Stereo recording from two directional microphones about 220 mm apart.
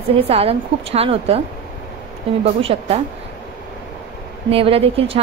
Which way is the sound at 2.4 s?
25° right (ahead or behind).